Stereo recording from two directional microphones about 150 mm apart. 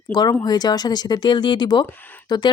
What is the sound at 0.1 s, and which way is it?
A woman's voice, 25° left (ahead or behind).